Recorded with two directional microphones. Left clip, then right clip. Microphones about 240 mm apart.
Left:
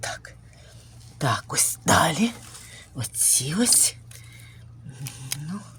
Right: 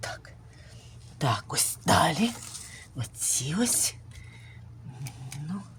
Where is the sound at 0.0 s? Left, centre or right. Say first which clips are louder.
Left 5 dB; centre.